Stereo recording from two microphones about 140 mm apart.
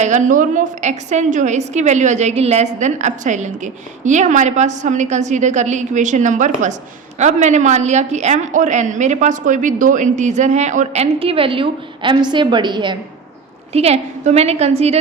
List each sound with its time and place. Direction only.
0.0 s a woman's voice: 60° right (ahead or behind); by 13.0 s 35° right (ahead or behind)
13.7 s a woman's voice: 50° right (ahead or behind)